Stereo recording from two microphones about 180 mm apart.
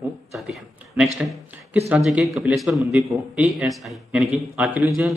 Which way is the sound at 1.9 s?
5° right (ahead or behind).